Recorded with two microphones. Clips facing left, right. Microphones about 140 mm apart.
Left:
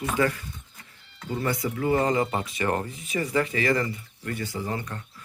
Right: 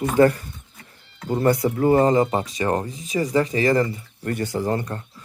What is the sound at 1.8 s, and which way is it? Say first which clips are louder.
Speech: right 5 dB; 40° right (ahead or behind).